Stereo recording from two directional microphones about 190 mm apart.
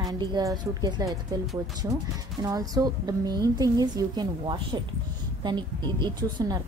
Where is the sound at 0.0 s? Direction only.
20° right (ahead or behind).